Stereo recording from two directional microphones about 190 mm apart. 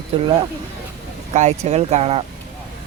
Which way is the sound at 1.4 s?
35° right (ahead or behind).